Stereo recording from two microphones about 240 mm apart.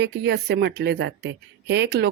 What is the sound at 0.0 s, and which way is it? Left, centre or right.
A woman's voice, right.